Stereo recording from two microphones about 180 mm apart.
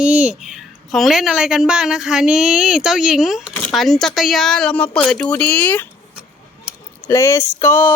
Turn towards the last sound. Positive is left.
turn(degrees=15)  # may be behind; listen again after turning